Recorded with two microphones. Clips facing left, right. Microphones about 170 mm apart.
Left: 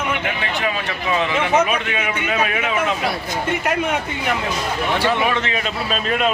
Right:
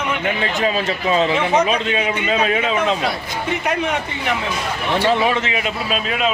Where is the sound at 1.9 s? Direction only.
35° right (ahead or behind).